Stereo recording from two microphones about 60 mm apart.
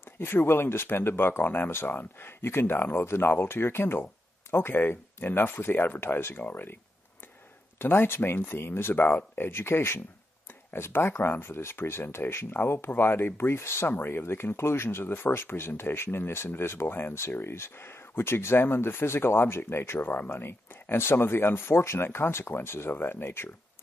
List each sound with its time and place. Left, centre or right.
0.2 s speech: left
7.8 s speech: left